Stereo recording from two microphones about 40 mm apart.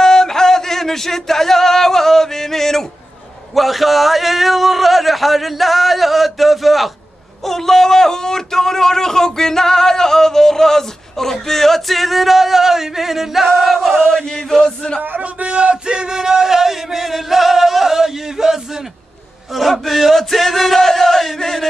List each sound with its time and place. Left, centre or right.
0.0 s a sound: centre
3.5 s a man's voice: centre
14.0 s a man's voice: centre
15.0 s a man's voice: right; by 21.6 s centre